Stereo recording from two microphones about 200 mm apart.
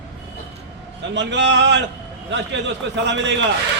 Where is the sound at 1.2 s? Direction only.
60° right (ahead or behind).